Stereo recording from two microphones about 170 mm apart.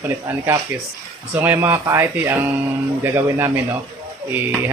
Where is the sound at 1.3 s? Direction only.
10° right (ahead or behind).